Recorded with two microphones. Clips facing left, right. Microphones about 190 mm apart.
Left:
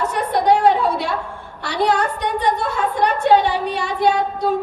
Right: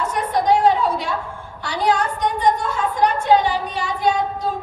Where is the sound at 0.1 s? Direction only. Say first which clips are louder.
Even; 65° left (ahead or behind).